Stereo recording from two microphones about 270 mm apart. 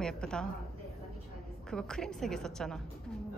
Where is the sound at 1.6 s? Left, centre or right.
Centre.